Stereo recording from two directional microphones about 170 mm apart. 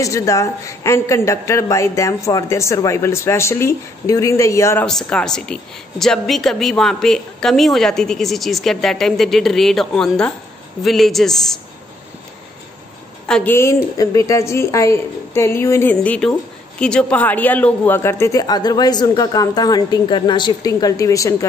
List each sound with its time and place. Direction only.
0.0 s a woman's voice: 20° left (ahead or behind)
4.8 s a woman's voice: 5° left (ahead or behind)
13.3 s a woman's voice: 10° left (ahead or behind)